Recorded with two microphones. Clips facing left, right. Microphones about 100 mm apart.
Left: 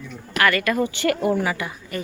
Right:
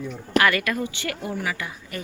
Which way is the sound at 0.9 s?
55° left (ahead or behind).